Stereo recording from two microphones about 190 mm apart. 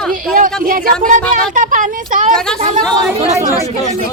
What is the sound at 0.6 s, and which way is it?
Speech, 45° right (ahead or behind).